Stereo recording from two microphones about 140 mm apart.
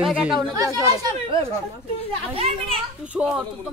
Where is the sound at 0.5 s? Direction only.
25° right (ahead or behind).